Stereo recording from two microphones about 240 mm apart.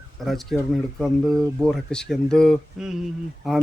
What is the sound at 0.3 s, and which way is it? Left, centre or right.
A man's voice, centre.